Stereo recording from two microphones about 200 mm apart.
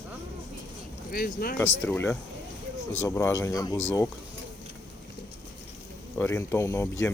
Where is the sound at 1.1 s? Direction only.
50° left (ahead or behind).